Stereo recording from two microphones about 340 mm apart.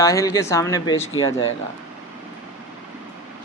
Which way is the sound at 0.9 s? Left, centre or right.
Left.